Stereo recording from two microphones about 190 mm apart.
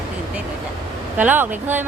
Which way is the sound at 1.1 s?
10° right (ahead or behind).